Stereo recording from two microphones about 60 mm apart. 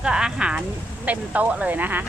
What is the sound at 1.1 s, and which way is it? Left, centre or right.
Speech, right.